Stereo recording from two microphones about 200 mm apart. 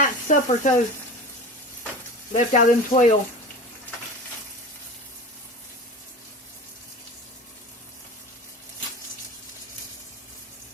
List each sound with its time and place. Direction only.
0.0 s sizzle: 40° left (ahead or behind)
2.3 s speech: 40° left (ahead or behind)